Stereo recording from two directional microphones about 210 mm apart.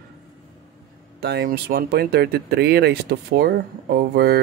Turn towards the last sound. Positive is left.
turn(degrees=-50)  # may be behind; listen again after turning